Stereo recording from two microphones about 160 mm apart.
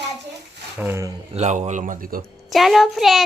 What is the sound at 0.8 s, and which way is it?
Speech, 15° right (ahead or behind).